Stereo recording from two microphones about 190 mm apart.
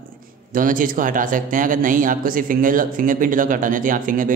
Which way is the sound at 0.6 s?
45° right (ahead or behind).